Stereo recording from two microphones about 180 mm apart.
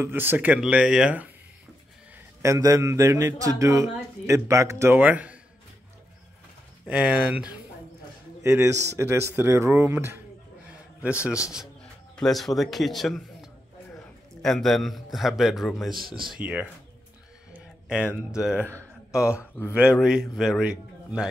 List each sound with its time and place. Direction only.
0.0 s a man's voice: 10° right (ahead or behind)
2.1 s a man's voice: 15° right (ahead or behind)
6.9 s a man's voice: 5° right (ahead or behind)
11.5 s a man's voice: centre (ahead or behind)
17.5 s a sound: 5° right (ahead or behind)
18.3 s a man's voice: 5° right (ahead or behind)
19.7 s a man's voice: 5° right (ahead or behind)